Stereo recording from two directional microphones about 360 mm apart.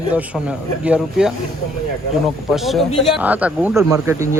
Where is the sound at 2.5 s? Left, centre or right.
Centre.